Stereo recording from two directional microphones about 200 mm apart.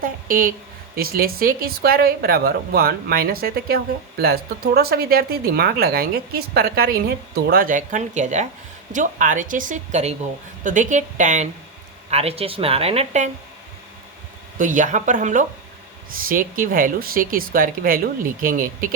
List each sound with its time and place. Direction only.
0.0 s a woman's voice: 45° right (ahead or behind)
14.6 s a woman's voice: 40° right (ahead or behind)